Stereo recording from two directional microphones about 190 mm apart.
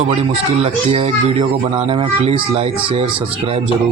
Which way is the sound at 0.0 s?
35° right (ahead or behind).